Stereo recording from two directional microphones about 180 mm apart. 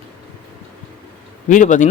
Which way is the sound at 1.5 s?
45° left (ahead or behind).